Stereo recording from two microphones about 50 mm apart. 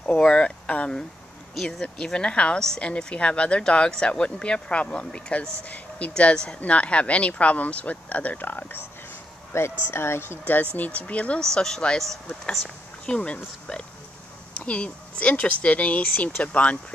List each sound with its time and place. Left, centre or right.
0.0 s speech: centre; by 8.8 s left
9.5 s speech: left
9.8 s speech: left
10.4 s speech: left
11.5 s speech: centre; by 16.3 s left